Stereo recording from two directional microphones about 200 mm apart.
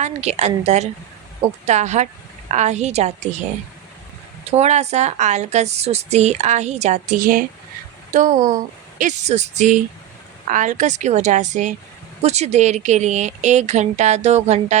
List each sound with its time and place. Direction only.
0.0 s speech: 35° right (ahead or behind)
4.5 s speech: 35° right (ahead or behind)